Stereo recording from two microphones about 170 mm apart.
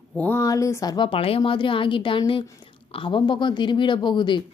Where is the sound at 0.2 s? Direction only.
15° left (ahead or behind).